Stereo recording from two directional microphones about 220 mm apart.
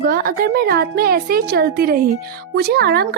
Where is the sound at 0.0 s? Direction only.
40° right (ahead or behind).